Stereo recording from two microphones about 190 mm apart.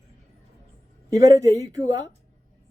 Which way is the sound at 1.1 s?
20° right (ahead or behind).